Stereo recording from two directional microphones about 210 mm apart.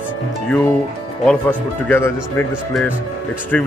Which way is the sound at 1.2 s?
10° left (ahead or behind).